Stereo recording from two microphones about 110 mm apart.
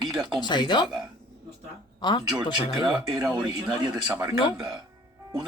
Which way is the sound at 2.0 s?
45° left (ahead or behind).